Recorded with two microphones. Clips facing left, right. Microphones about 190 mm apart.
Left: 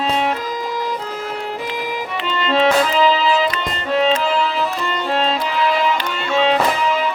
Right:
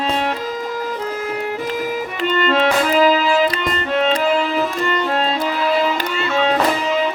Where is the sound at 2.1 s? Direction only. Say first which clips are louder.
Right 1 dB; 50° right (ahead or behind).